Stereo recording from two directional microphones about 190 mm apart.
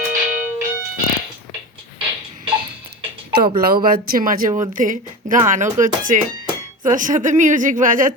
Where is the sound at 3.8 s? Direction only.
50° right (ahead or behind).